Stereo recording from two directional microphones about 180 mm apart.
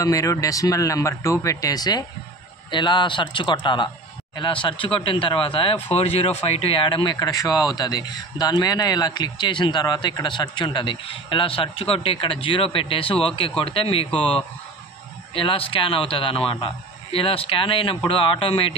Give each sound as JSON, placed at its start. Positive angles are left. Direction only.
{"t": 0.0, "sound": "speech", "side_deg": 15}